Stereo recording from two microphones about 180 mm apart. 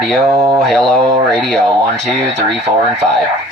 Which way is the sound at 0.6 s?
Centre (ahead or behind).